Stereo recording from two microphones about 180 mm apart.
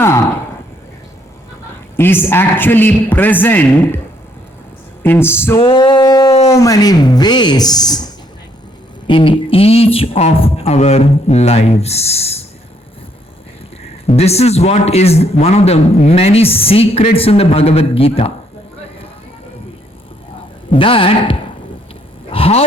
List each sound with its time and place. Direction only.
2.0 s a man's voice: 10° left (ahead or behind)
5.0 s a man's voice: 10° left (ahead or behind)
5.5 s a sound: 25° left (ahead or behind)
6.5 s speech: 20° left (ahead or behind)
9.0 s speech: 30° left (ahead or behind)
14.1 s a man's voice: 35° left (ahead or behind)
20.7 s speech: 30° left (ahead or behind)
22.3 s vehicle: 30° left (ahead or behind)